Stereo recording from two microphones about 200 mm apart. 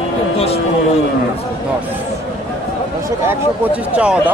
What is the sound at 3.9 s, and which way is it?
Speech, 5° right (ahead or behind).